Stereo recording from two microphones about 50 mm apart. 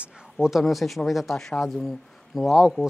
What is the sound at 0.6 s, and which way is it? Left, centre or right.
Speech, centre.